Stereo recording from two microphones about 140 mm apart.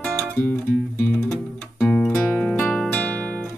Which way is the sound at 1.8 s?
5° left (ahead or behind).